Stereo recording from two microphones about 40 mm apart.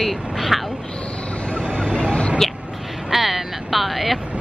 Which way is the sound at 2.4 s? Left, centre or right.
Centre.